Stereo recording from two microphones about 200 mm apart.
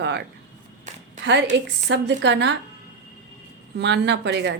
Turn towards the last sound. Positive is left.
turn(degrees=-60)  # may be behind; listen again after turning